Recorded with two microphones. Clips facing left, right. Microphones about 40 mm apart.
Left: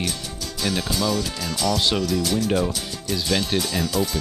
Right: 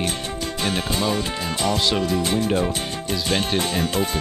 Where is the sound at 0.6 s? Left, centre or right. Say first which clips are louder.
Even; right.